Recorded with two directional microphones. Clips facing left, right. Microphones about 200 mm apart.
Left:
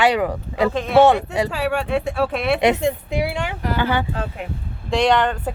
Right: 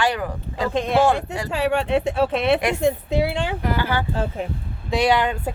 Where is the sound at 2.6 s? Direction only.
25° left (ahead or behind).